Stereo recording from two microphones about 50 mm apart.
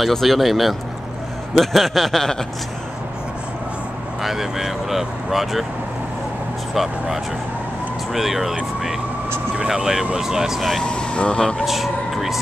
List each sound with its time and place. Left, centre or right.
0.1 s speech: centre
4.2 s speech: centre
6.7 s speech: centre
9.7 s speech: centre
10.8 s speech: centre
11.6 s speech: centre